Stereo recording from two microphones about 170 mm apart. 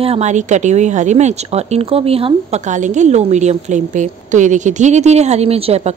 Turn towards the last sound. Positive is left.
turn(degrees=-35)  # may be behind; listen again after turning